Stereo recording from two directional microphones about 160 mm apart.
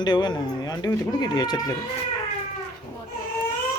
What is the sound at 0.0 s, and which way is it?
Speech, 25° left (ahead or behind).